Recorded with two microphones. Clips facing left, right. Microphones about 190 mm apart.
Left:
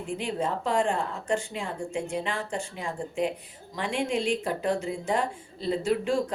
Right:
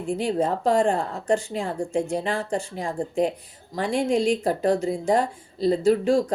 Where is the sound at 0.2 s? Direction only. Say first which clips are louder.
Right 6 dB; 40° right (ahead or behind).